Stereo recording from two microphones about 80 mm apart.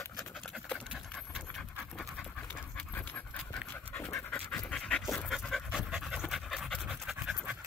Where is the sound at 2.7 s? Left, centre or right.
Left; by 7.4 s centre.